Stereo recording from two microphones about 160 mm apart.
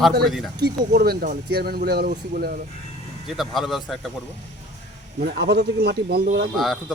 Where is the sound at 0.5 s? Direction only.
85° right; by 2.6 s 65° right (ahead or behind).